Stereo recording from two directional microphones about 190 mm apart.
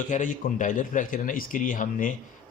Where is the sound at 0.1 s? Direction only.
40° left (ahead or behind).